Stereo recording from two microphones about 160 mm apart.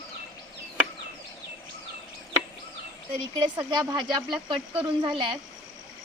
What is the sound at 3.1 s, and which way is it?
Speech, 30° right (ahead or behind).